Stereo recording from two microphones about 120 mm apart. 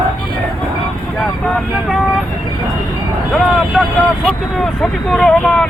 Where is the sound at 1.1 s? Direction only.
Centre (ahead or behind).